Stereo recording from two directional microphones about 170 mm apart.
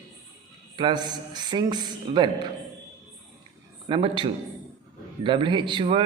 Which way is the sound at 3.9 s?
30° right (ahead or behind).